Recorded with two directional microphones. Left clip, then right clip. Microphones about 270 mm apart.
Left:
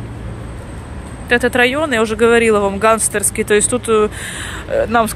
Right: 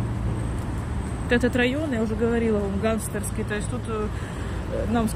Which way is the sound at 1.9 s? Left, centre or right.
Left.